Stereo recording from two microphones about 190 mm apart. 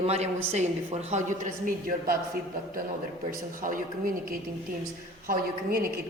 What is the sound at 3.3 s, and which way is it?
Speech, 45° right (ahead or behind).